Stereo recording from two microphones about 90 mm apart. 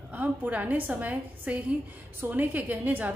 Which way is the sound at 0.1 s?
20° right (ahead or behind).